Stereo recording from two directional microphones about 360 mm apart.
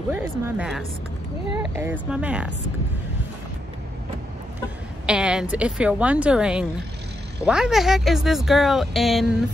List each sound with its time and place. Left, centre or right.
0.1 s speech: centre
5.0 s speech: centre